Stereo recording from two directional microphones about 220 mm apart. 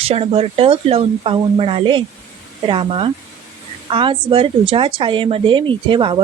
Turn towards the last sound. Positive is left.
turn(degrees=-20)  # may be behind; listen again after turning